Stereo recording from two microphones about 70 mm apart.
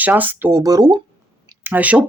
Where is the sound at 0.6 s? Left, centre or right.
Right.